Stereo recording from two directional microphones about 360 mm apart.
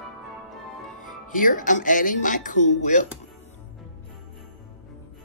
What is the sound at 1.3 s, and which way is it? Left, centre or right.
Speech, left.